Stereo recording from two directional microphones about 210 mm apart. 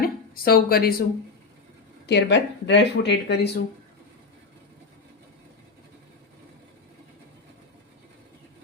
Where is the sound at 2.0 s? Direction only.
55° left (ahead or behind).